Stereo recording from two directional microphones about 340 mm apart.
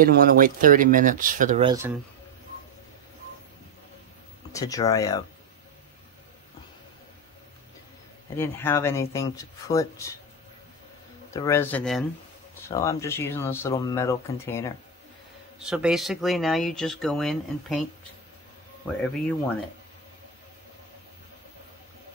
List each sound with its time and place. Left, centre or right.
0.0 s speech: right
4.5 s speech: centre
8.4 s speech: centre
11.3 s speech: centre
15.7 s speech: centre